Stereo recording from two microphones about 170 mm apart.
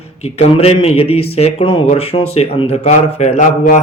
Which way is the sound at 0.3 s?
35° left (ahead or behind).